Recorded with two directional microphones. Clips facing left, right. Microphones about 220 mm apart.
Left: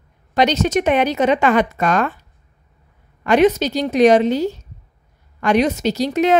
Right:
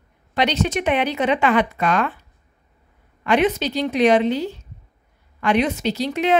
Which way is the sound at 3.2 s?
40° left (ahead or behind).